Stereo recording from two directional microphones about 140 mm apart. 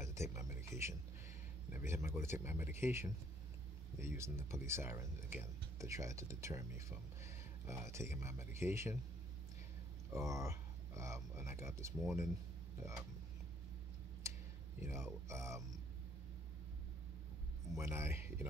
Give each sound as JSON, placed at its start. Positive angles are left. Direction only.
{"t": 0.0, "sound": "music", "side_deg": -20}
{"t": 1.7, "sound": "speech", "side_deg": -20}
{"t": 10.1, "sound": "speech", "side_deg": -20}
{"t": 14.2, "sound": "a sound", "side_deg": -20}
{"t": 14.8, "sound": "speech", "side_deg": -20}
{"t": 17.7, "sound": "speech", "side_deg": -20}